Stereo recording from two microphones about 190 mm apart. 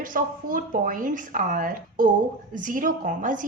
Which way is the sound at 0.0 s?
45° right (ahead or behind).